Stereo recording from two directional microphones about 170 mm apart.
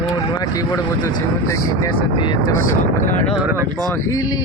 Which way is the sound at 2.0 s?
30° left (ahead or behind).